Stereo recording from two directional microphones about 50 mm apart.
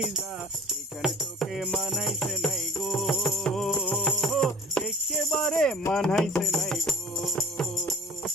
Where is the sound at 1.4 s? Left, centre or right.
Centre.